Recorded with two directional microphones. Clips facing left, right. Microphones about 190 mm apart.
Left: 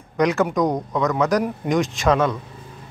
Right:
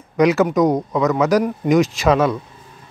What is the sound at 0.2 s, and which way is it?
Speech, 5° right (ahead or behind).